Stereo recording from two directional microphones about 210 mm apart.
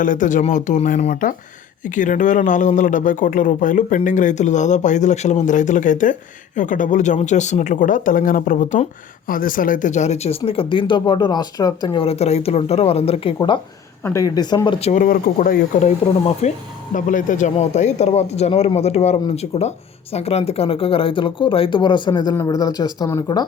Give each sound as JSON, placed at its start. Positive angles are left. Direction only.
{"t": 0.0, "sound": "speech", "side_deg": 40}
{"t": 14.0, "sound": "speech", "side_deg": 15}
{"t": 15.0, "sound": "speech", "side_deg": 45}